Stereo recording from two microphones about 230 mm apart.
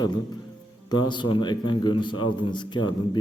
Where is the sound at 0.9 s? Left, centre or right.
Centre.